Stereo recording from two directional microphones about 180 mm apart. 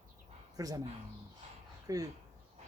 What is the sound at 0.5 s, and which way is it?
Speech, 20° right (ahead or behind).